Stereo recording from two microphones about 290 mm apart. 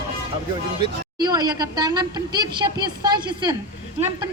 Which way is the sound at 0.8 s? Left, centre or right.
Centre.